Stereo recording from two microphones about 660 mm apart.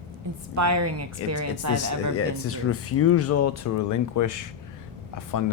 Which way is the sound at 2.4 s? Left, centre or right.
Centre.